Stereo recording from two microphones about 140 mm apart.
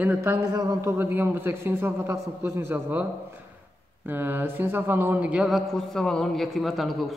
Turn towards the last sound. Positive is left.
turn(degrees=0)  # may be behind; listen again after turning